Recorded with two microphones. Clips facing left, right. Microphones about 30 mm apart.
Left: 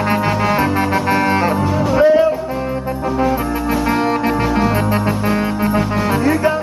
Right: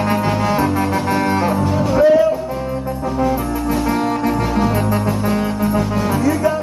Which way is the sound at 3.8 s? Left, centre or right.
Left.